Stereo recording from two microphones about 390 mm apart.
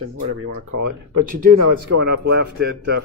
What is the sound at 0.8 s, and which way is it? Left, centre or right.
Speech, right.